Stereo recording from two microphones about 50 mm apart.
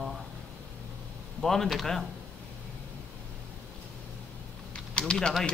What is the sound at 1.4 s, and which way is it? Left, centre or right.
Speech, centre.